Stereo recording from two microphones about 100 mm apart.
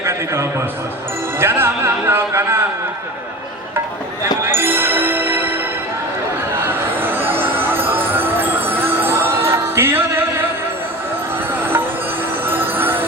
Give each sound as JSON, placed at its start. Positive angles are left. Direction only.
{"t": 0.0, "sound": "a sound", "side_deg": -25}
{"t": 1.4, "sound": "music", "side_deg": -20}
{"t": 4.2, "sound": "music", "side_deg": -25}
{"t": 12.5, "sound": "music", "side_deg": -20}